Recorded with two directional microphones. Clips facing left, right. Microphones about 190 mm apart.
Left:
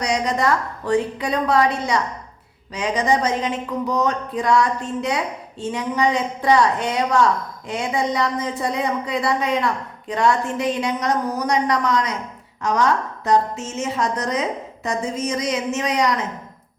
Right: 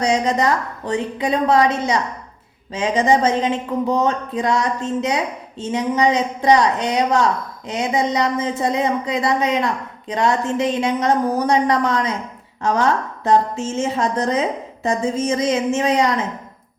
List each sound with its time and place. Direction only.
0.0 s speech: 25° right (ahead or behind)